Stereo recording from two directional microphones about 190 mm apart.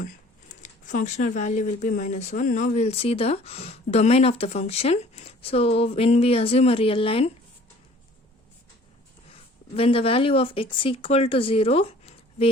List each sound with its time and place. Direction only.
0.0 s speech: 40° left (ahead or behind)
9.7 s speech: 30° left (ahead or behind)